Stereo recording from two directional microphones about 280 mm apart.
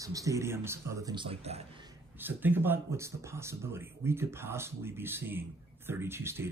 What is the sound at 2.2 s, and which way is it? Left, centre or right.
Speech, centre.